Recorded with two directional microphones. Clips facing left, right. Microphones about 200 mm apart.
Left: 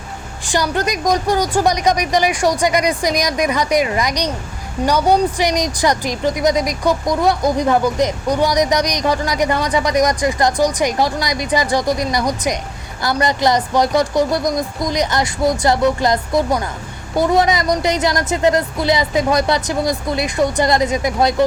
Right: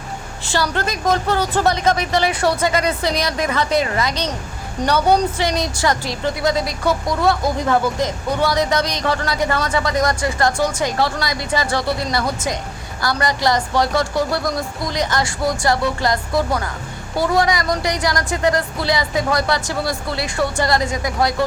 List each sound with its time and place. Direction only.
0.4 s a woman's voice: 15° left (ahead or behind)